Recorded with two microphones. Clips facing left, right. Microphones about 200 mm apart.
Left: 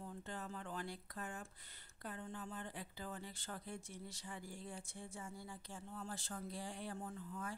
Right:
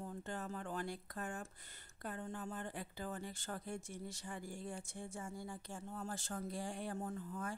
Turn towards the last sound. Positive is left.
turn(degrees=-45)  # may be behind; listen again after turning